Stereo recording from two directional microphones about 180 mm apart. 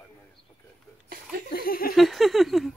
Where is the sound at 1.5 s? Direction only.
55° left (ahead or behind).